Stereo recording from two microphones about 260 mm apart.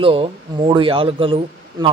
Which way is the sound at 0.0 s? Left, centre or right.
Right.